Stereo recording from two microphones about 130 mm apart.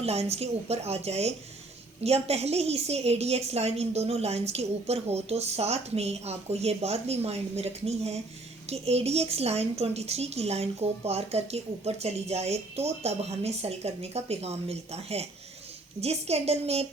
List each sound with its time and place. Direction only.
0.0 s a woman's voice: 55° right (ahead or behind)